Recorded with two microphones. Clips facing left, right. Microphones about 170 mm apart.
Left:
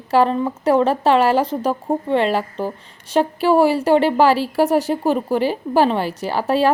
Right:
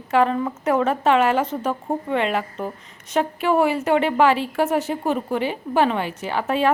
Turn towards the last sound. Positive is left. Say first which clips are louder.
# left 3 dB
turn(degrees=35)  # may be behind; listen again after turning